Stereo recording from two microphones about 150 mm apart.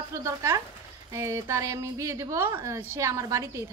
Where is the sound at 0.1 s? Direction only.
20° right (ahead or behind).